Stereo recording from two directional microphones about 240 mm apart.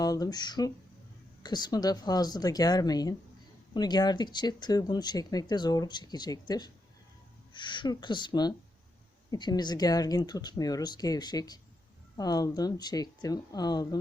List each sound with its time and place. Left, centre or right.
0.0 s speech: centre